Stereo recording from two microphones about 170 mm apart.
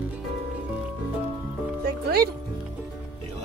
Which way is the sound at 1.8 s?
65° right (ahead or behind).